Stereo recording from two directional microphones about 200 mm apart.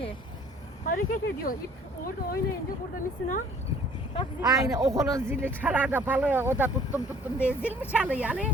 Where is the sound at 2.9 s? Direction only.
40° left (ahead or behind).